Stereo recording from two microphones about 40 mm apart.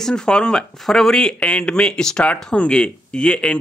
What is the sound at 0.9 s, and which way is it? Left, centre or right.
A man's voice, centre.